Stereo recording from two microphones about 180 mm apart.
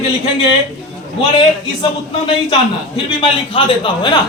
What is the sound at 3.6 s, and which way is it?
Speech, 30° left (ahead or behind).